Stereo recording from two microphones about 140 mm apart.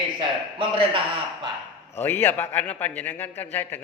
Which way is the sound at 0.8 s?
40° right (ahead or behind).